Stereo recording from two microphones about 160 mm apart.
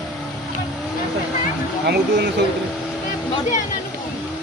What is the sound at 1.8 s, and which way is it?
Speech, 90° right.